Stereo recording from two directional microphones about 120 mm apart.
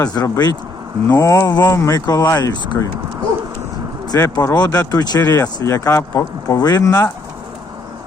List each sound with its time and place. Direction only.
0.0 s speech: 35° left (ahead or behind)
4.1 s speech: 30° left (ahead or behind)